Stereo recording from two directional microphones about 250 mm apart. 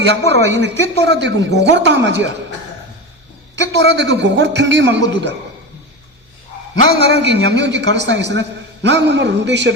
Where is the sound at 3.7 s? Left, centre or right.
Right.